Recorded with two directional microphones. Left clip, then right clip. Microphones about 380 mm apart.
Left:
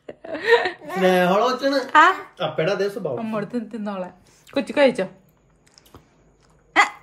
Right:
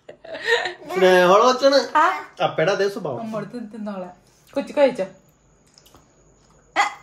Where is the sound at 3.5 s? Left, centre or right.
Left.